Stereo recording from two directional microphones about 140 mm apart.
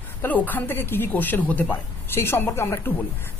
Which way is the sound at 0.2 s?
10° left (ahead or behind).